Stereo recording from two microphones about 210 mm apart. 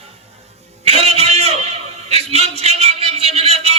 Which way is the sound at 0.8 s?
30° right (ahead or behind).